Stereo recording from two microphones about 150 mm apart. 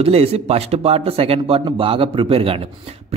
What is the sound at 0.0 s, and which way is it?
A man's voice, 40° right (ahead or behind).